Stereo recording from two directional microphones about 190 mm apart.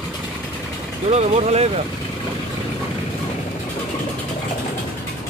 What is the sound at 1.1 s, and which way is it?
Speech, 35° right (ahead or behind).